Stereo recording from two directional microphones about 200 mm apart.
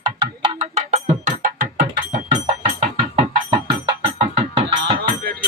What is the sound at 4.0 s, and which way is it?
Music, 30° right (ahead or behind).